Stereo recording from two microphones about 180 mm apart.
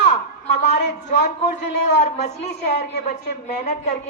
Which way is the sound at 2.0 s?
40° left (ahead or behind).